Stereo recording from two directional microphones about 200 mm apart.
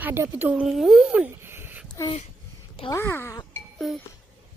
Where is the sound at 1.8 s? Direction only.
15° left (ahead or behind).